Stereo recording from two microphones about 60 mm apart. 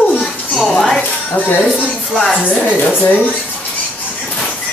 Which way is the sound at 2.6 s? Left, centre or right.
Left.